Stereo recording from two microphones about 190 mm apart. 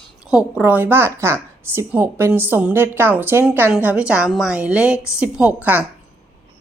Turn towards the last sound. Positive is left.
turn(degrees=-10)  # may be behind; listen again after turning